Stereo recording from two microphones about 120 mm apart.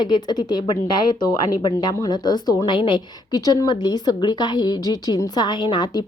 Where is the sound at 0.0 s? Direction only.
35° left (ahead or behind).